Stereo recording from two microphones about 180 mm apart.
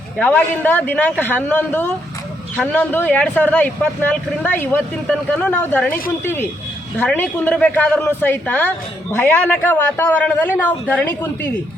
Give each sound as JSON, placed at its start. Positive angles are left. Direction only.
{"t": 0.2, "sound": "a man's voice", "side_deg": 10}